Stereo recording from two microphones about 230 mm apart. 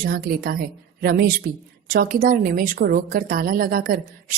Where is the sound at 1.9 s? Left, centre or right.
Right.